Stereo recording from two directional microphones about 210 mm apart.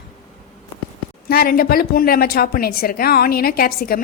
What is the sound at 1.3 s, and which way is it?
A woman's voice, 45° left (ahead or behind).